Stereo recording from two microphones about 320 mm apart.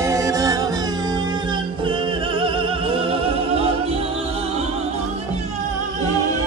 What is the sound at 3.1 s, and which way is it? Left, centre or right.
Music, centre.